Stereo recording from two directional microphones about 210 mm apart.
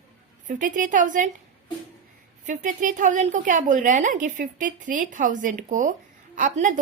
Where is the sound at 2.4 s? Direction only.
35° right (ahead or behind).